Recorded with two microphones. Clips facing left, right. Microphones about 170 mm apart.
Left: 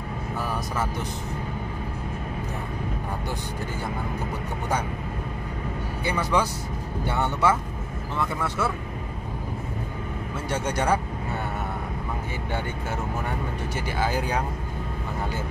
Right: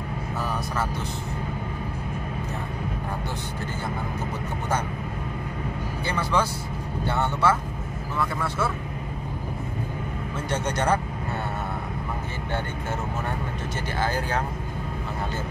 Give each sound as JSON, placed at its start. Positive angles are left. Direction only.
{"t": 6.3, "sound": "speech", "side_deg": 15}
{"t": 10.5, "sound": "speech", "side_deg": 10}
{"t": 13.9, "sound": "speech", "side_deg": 10}